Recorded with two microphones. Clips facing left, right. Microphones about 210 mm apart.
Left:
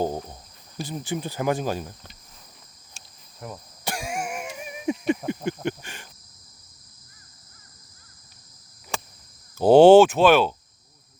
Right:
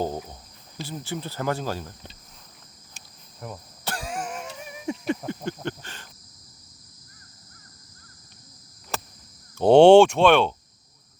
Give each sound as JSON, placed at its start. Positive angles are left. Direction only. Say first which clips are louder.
{"t": 0.8, "sound": "speech", "louder": "left 3 dB", "side_deg": 15}
{"t": 3.4, "sound": "speech", "louder": "even", "side_deg": 0}
{"t": 3.8, "sound": "throat clearing", "louder": "left 2 dB", "side_deg": 10}
{"t": 5.1, "sound": "speech", "louder": "left 3 dB", "side_deg": 15}
{"t": 5.6, "sound": "cricket", "louder": "left 4 dB", "side_deg": 15}
{"t": 8.9, "sound": "a sound", "louder": "even", "side_deg": -5}
{"t": 9.6, "sound": "speech", "louder": "even", "side_deg": 5}